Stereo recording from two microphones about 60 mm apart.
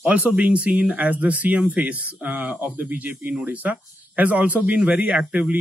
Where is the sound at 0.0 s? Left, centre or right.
Right.